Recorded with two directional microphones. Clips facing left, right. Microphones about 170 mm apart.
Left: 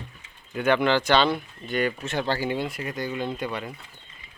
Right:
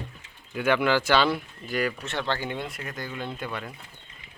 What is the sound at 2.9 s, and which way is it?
Speech, 20° left (ahead or behind).